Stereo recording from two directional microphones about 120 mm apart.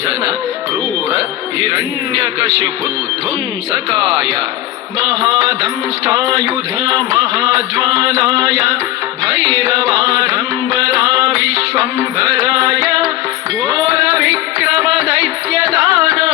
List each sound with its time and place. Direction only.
1.6 s music: 35° right (ahead or behind)
4.9 s music: 35° right (ahead or behind)